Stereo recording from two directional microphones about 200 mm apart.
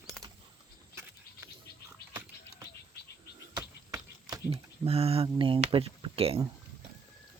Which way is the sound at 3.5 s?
20° right (ahead or behind).